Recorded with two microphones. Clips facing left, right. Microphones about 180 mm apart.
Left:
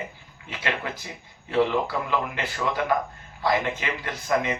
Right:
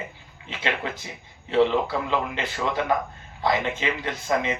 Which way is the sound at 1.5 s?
20° right (ahead or behind).